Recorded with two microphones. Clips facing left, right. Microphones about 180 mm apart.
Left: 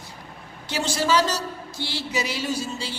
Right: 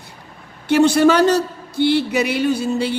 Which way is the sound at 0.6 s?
60° right (ahead or behind).